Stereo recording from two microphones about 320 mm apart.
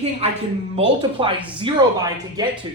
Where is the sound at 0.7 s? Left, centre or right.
Centre.